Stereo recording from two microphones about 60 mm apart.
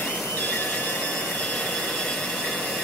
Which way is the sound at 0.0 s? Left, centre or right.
Left.